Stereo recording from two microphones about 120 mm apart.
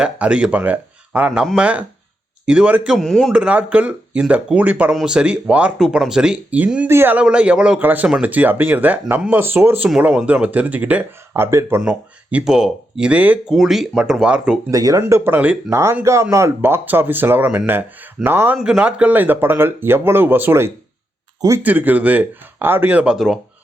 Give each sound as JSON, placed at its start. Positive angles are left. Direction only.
{"t": 0.0, "sound": "speech", "side_deg": -10}
{"t": 3.0, "sound": "speech", "side_deg": 0}
{"t": 3.3, "sound": "speech", "side_deg": -10}
{"t": 11.8, "sound": "speech", "side_deg": -10}
{"t": 13.5, "sound": "speech", "side_deg": 0}
{"t": 14.7, "sound": "speech", "side_deg": -30}
{"t": 15.0, "sound": "speech", "side_deg": -20}
{"t": 18.5, "sound": "speech", "side_deg": -5}